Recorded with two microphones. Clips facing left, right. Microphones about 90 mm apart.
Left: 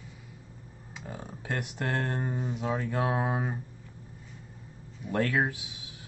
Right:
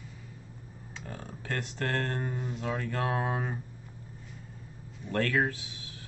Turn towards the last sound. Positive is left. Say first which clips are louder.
# even
turn(degrees=15)  # may be behind; listen again after turning